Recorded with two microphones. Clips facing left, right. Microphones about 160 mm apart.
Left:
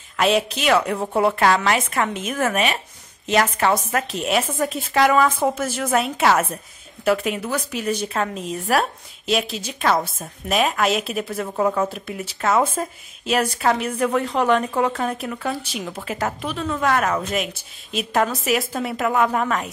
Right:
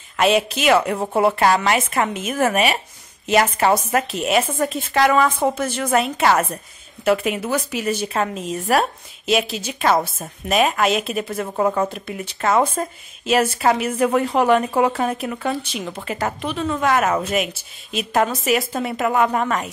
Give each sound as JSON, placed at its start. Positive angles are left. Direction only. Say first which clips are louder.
{"t": 0.2, "sound": "a woman's voice", "louder": "right 2 dB", "side_deg": 0}